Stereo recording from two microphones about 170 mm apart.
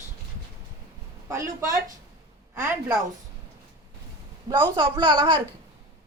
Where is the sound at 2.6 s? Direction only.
10° right (ahead or behind).